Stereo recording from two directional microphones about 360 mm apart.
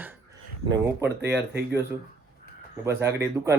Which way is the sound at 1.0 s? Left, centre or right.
Right.